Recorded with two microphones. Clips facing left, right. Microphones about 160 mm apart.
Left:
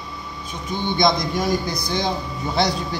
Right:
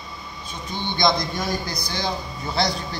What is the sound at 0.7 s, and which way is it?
Speech, 15° left (ahead or behind).